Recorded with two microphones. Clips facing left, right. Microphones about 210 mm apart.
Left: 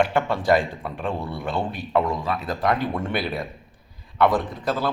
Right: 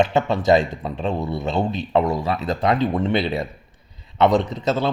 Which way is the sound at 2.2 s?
20° right (ahead or behind).